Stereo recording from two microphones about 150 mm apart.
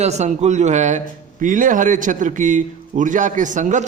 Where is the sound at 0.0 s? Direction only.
50° right (ahead or behind).